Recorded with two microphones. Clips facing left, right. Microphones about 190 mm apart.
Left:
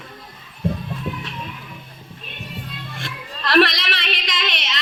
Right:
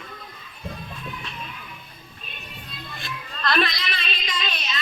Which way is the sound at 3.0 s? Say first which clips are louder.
Right 1 dB; 90° left.